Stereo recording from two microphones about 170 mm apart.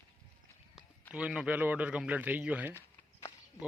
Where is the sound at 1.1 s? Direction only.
5° right (ahead or behind).